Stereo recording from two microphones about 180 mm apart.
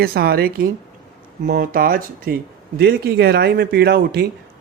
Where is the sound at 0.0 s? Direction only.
60° right (ahead or behind).